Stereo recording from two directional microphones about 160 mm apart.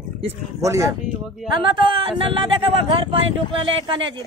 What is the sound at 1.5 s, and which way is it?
Speech, 30° right (ahead or behind).